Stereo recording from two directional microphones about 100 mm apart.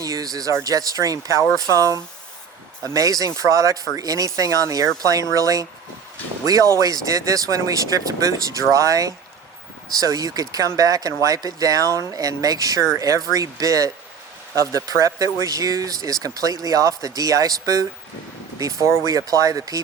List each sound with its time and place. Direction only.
0.0 s speech: 35° right (ahead or behind)